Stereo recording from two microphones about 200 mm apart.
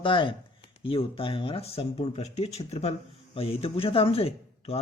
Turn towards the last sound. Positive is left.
turn(degrees=30)  # may be behind; listen again after turning